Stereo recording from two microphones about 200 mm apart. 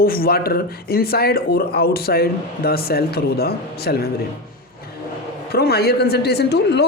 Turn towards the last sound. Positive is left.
turn(degrees=55)  # may be behind; listen again after turning